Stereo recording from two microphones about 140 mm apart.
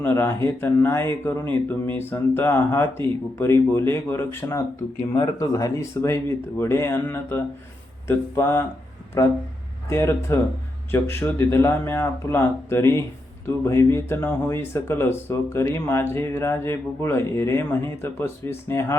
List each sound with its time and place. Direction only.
0.0 s speech: 15° left (ahead or behind)
9.9 s speech: 20° left (ahead or behind)